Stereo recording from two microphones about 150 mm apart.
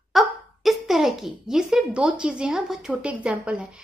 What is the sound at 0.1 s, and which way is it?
A woman's voice, centre (ahead or behind).